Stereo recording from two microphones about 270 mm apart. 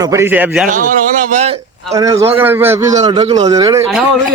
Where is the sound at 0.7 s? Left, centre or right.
Right.